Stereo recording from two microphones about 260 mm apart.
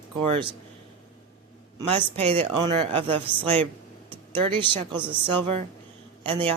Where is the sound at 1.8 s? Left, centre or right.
Centre.